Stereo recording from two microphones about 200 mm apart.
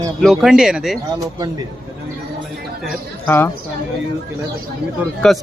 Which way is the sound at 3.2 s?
10° left (ahead or behind).